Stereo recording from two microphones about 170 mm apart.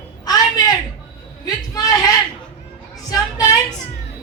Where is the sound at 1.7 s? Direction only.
20° left (ahead or behind).